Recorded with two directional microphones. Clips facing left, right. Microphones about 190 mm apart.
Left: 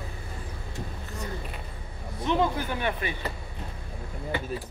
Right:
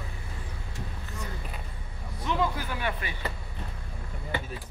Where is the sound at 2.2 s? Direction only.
20° left (ahead or behind).